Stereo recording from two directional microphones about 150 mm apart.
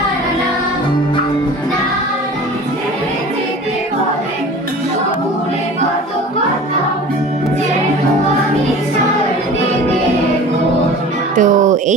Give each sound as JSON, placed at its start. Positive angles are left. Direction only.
{"t": 11.3, "sound": "music", "side_deg": -60}